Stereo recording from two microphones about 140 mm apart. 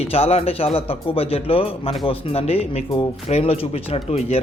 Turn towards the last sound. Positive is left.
turn(degrees=50)  # may be behind; listen again after turning